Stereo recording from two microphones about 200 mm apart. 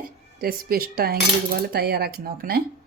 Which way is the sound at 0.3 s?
50° right (ahead or behind).